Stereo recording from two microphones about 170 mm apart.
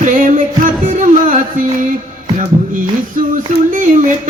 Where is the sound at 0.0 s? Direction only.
50° right (ahead or behind).